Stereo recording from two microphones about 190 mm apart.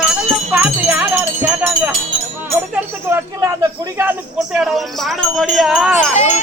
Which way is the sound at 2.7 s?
15° right (ahead or behind).